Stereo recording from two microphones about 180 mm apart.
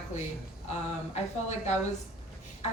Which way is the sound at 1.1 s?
40° left (ahead or behind).